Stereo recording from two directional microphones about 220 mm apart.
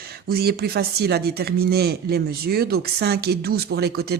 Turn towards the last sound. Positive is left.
turn(degrees=-45)  # may be behind; listen again after turning